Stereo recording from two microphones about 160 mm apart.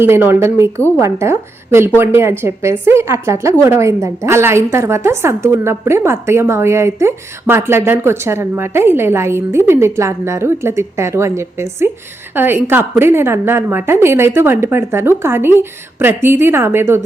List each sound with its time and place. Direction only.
0.0 s a woman's voice: 15° right (ahead or behind)